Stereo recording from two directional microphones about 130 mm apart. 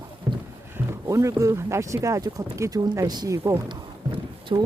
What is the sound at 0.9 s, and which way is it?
Speech, 25° right (ahead or behind).